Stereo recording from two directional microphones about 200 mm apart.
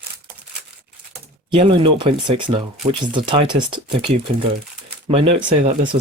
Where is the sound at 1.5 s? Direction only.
25° right (ahead or behind).